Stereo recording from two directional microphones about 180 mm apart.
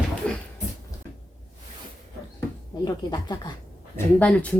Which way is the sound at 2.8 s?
25° left (ahead or behind).